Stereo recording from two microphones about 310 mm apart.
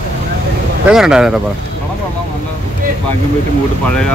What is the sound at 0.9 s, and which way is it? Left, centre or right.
Speech, centre.